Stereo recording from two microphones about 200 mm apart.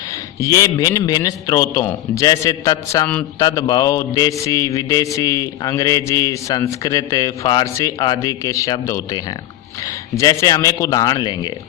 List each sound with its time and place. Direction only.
0.3 s mantra: 15° left (ahead or behind)